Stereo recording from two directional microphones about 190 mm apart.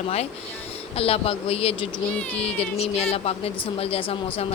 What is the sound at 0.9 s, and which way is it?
A woman's voice, 30° left (ahead or behind).